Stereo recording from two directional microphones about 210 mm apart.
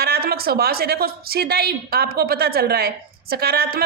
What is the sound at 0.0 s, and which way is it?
Speech, 45° right (ahead or behind).